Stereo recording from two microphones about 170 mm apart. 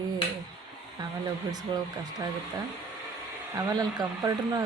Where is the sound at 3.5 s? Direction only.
20° right (ahead or behind).